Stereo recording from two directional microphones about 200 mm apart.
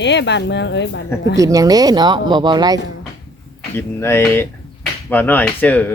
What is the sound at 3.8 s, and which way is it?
Speech, 10° left (ahead or behind).